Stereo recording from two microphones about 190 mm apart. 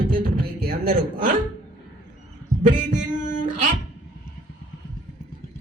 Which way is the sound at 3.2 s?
40° right (ahead or behind).